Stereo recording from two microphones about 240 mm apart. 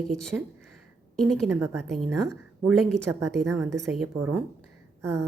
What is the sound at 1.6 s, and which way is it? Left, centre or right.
Speech, right.